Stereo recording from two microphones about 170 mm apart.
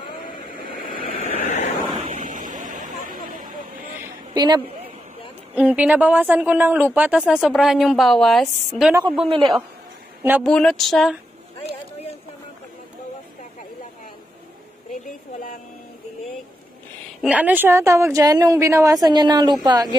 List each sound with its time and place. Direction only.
0.0 s vehicle: 55° left (ahead or behind)
2.1 s a sound: 50° right (ahead or behind)
4.3 s a woman's voice: 25° right (ahead or behind)
5.5 s a woman's voice: 10° right (ahead or behind)
9.3 s speech: 30° right (ahead or behind)
10.4 s speech: 5° left (ahead or behind)
17.2 s a woman's voice: 10° right (ahead or behind); by 20.0 s 25° right (ahead or behind)